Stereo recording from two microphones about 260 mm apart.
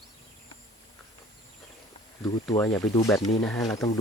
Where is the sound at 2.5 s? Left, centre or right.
Centre.